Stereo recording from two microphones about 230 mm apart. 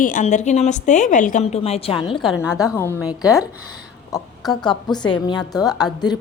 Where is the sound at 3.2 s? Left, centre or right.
Centre.